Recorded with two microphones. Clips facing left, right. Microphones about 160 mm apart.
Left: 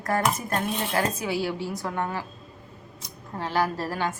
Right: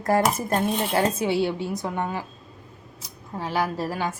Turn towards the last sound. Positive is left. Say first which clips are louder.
# right 1 dB
turn(degrees=-10)  # may be behind; listen again after turning